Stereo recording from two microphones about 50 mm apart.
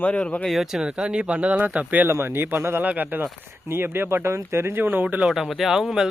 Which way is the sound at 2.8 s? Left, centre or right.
Right.